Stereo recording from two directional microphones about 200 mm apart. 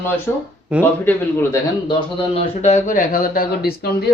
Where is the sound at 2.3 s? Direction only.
35° left (ahead or behind).